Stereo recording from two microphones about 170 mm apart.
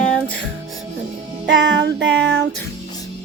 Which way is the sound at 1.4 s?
90° right.